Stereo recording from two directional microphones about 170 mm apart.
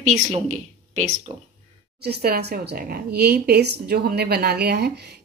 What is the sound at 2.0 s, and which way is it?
Speech, 65° right (ahead or behind).